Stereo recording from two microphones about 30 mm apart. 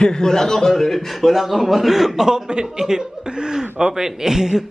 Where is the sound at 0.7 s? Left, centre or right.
Centre.